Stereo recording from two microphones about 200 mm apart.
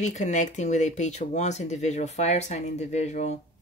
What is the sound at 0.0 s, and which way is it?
Speech, 35° left (ahead or behind).